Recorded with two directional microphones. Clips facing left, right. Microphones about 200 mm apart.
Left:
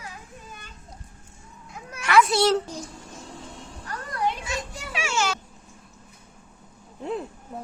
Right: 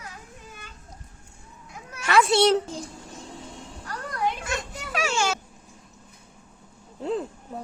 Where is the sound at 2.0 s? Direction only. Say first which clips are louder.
Even; 25° right (ahead or behind).